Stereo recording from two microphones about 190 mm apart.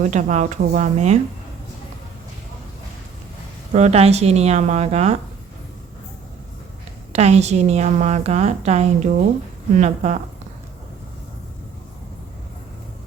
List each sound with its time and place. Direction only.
0.0 s a woman's voice: 40° right (ahead or behind)
3.7 s a woman's voice: 35° right (ahead or behind)
7.1 s a woman's voice: 35° right (ahead or behind)